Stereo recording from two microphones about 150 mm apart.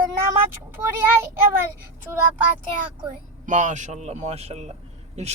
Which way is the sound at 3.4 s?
55° right (ahead or behind).